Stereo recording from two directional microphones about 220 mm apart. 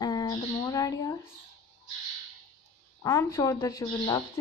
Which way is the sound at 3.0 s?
15° left (ahead or behind).